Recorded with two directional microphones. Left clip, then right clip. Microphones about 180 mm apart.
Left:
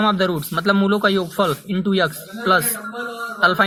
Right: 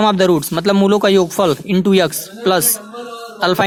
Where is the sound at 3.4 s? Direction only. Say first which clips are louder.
Right 1 dB; 45° right (ahead or behind).